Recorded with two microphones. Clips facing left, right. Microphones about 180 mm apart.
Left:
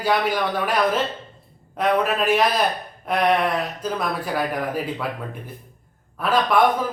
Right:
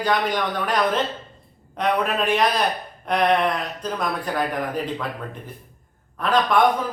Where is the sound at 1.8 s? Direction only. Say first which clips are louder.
Left 2 dB; 5° left (ahead or behind).